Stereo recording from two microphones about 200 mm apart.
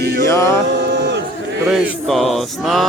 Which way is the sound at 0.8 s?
60° right (ahead or behind).